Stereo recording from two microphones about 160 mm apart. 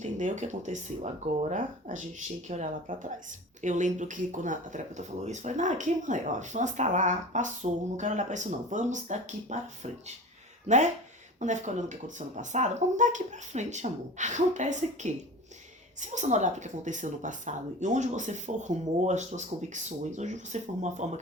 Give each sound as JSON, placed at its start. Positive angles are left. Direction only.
{"t": 0.0, "sound": "speech", "side_deg": -50}